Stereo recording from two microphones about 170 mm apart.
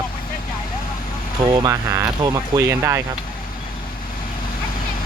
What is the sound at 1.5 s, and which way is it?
Speech, 20° right (ahead or behind).